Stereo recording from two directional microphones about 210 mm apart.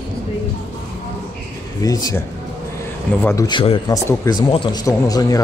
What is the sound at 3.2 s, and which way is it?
A man's voice, 15° left (ahead or behind).